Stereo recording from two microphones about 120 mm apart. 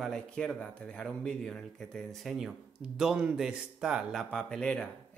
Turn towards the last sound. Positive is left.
turn(degrees=10)  # may be behind; listen again after turning